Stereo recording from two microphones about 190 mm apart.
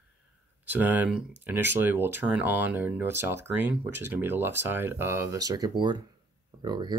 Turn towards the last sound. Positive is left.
turn(degrees=-20)  # may be behind; listen again after turning